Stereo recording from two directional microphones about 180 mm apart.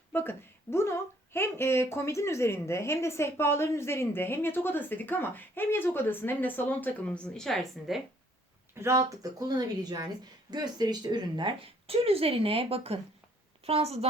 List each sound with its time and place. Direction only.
0.1 s speech: 10° left (ahead or behind)
8.7 s speech: 15° right (ahead or behind); by 14.1 s 35° right (ahead or behind)